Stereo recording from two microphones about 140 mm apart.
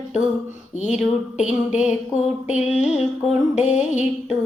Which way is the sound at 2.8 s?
5° right (ahead or behind).